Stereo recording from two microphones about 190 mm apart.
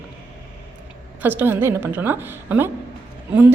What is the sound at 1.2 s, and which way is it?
A woman's voice, 10° right (ahead or behind).